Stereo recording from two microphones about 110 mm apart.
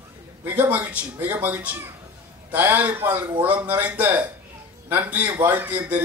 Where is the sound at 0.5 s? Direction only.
15° right (ahead or behind).